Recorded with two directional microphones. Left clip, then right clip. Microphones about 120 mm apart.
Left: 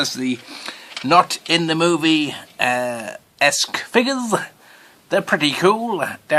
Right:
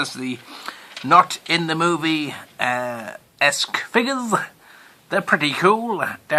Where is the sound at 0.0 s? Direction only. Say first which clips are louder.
Left 4 dB; 25° left (ahead or behind).